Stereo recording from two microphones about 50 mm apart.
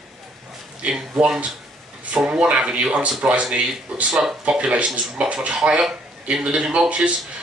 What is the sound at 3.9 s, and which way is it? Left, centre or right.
Speech, centre.